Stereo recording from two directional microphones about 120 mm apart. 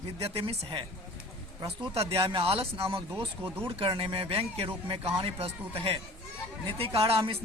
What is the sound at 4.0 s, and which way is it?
Speech, 50° right (ahead or behind).